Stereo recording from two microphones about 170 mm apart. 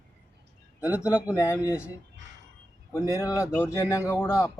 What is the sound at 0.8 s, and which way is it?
Speech, 10° right (ahead or behind).